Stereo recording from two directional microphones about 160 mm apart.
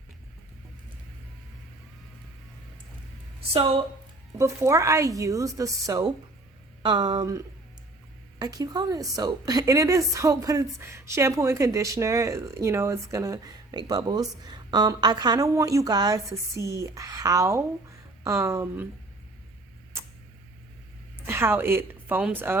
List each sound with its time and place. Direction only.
3.5 s a woman's voice: 35° right (ahead or behind)
4.4 s a woman's voice: 20° right (ahead or behind)
21.2 s a woman's voice: 15° right (ahead or behind)